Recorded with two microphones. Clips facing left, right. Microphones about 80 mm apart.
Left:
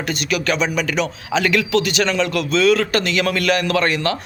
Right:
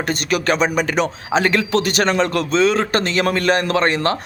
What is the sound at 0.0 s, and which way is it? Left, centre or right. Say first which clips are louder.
Speech: right 2 dB; right.